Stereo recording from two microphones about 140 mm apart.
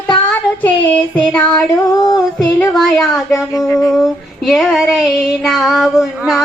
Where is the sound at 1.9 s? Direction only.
25° left (ahead or behind).